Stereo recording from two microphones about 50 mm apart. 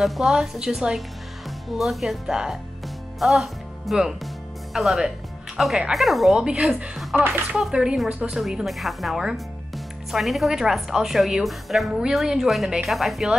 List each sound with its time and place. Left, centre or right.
0.0 s a woman's voice: centre
0.3 s a woman's voice: centre
6.3 s speech: centre
7.2 s speech: right
7.7 s a woman's voice: centre
8.4 s a woman's voice: centre